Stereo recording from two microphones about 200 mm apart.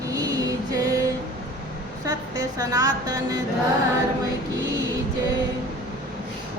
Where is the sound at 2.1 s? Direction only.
20° right (ahead or behind).